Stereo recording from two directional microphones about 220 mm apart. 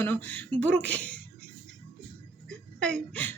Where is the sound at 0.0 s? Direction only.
10° left (ahead or behind).